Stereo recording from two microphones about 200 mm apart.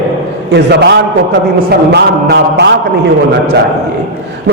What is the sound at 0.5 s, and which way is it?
A man's voice, 60° right (ahead or behind).